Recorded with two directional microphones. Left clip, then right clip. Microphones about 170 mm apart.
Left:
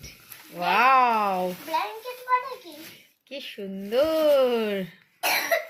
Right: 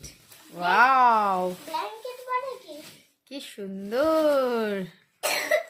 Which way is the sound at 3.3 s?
85° right.